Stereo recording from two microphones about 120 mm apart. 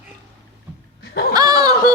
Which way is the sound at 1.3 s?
35° right (ahead or behind).